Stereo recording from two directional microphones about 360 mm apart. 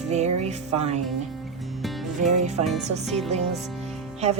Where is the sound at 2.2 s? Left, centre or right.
Centre.